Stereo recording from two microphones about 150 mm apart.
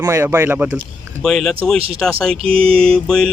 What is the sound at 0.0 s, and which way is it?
Speech, 20° right (ahead or behind).